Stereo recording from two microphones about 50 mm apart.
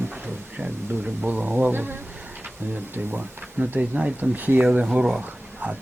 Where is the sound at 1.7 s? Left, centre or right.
Right.